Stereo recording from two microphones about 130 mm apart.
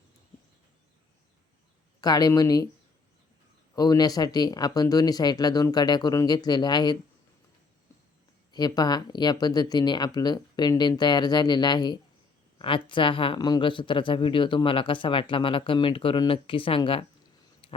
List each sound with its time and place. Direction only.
2.0 s speech: 30° left (ahead or behind)
3.8 s speech: 30° left (ahead or behind)
8.5 s speech: 30° left (ahead or behind)
17.6 s a sound: 45° left (ahead or behind)